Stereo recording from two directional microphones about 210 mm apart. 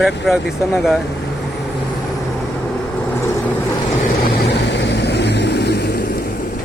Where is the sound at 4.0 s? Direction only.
50° left (ahead or behind).